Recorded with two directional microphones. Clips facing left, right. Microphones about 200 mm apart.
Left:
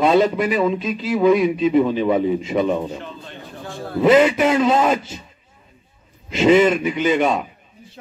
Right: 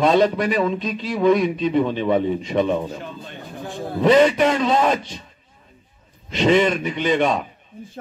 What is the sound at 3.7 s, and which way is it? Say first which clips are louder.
Speech: right 2 dB; 15° right (ahead or behind).